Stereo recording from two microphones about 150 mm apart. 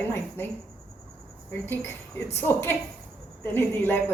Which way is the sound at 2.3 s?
15° left (ahead or behind).